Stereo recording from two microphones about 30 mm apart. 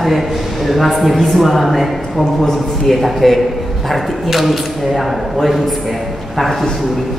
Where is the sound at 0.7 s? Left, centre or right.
Centre.